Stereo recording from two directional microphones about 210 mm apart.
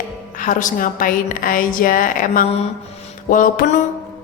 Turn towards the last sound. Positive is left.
turn(degrees=40)  # may be behind; listen again after turning